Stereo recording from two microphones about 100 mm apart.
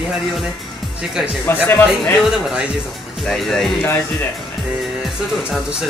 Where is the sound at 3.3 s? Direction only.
5° left (ahead or behind).